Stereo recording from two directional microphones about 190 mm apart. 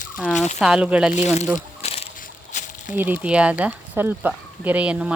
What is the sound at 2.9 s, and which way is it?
Speech, 10° right (ahead or behind).